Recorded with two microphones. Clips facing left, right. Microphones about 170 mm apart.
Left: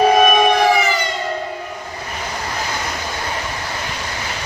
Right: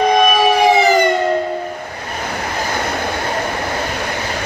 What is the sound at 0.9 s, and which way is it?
Siren, 50° right (ahead or behind).